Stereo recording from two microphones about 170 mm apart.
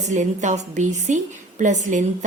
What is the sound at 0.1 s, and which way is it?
A woman's voice, 45° right (ahead or behind).